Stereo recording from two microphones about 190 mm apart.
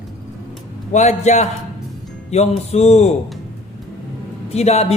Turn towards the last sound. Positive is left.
turn(degrees=35)  # may be behind; listen again after turning